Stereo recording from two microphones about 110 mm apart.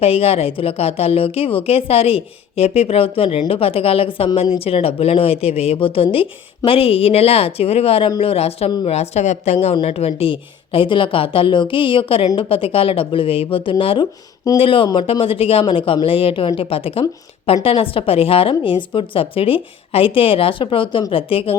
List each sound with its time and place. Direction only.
0.0 s a woman's voice: 65° left (ahead or behind)
8.8 s a woman's voice: 75° left (ahead or behind)
9.8 s a woman's voice: 65° left (ahead or behind)